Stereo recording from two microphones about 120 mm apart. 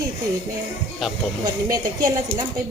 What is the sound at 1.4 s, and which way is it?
A woman's voice, 35° right (ahead or behind).